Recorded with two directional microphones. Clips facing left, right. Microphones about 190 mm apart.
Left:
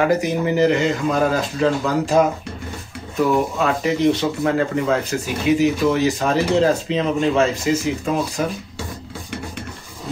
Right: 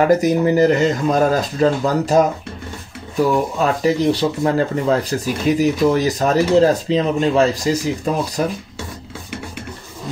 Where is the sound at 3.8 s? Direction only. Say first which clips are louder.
Right 1 dB; 35° right (ahead or behind).